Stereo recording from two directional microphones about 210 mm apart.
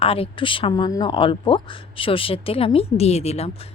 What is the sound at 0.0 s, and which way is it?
Speech, 25° left (ahead or behind).